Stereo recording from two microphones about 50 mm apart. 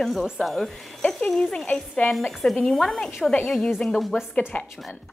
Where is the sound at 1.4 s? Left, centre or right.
Centre.